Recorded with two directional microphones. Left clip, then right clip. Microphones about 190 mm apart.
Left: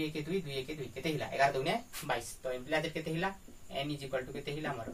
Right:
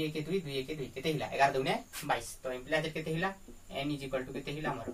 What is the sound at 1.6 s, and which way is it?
Speech, 20° left (ahead or behind).